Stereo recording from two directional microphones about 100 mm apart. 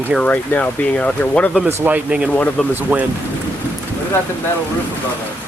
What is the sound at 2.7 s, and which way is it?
Speech, 15° right (ahead or behind).